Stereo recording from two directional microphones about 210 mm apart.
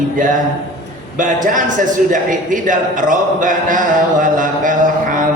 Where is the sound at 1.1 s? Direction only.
40° right (ahead or behind).